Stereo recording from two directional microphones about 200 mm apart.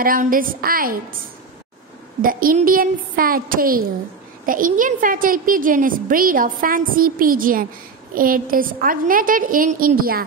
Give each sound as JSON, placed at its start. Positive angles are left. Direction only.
{"t": 0.0, "sound": "a woman's voice", "side_deg": -45}
{"t": 2.2, "sound": "a woman's voice", "side_deg": -45}